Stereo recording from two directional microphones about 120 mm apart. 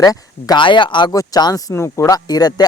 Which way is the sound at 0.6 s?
40° left (ahead or behind).